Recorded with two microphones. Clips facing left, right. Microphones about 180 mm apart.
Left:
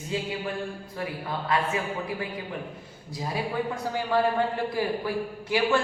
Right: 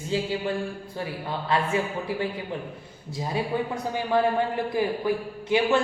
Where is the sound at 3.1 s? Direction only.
20° right (ahead or behind).